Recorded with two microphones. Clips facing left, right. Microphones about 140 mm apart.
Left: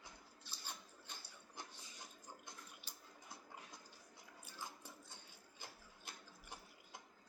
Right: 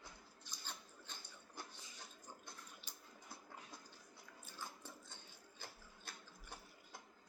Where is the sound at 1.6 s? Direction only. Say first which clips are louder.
Right 1 dB; 20° left (ahead or behind).